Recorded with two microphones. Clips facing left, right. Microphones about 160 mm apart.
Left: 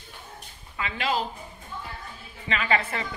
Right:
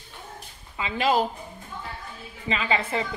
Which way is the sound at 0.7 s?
25° right (ahead or behind).